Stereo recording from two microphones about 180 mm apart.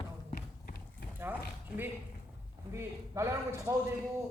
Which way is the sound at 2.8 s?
15° right (ahead or behind).